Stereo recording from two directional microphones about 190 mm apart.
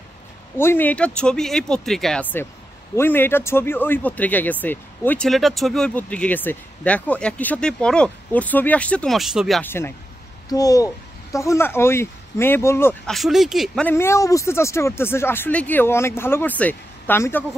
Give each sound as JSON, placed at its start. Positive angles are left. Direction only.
{"t": 0.6, "sound": "speech", "side_deg": 10}
{"t": 9.6, "sound": "speech", "side_deg": 10}
{"t": 13.1, "sound": "speech", "side_deg": 0}
{"t": 13.8, "sound": "speech", "side_deg": 15}